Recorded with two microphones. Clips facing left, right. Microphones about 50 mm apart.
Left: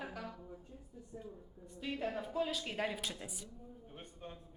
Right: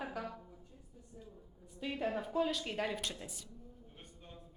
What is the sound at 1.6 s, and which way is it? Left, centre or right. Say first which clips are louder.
A woman's voice: right 2 dB; centre.